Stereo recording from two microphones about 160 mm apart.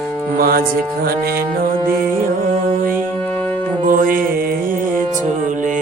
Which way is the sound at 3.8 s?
60° right (ahead or behind).